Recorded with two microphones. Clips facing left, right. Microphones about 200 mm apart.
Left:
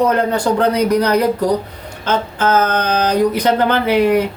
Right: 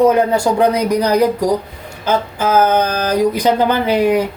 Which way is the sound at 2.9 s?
70° left (ahead or behind).